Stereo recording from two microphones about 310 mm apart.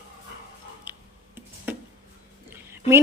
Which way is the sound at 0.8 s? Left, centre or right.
Centre.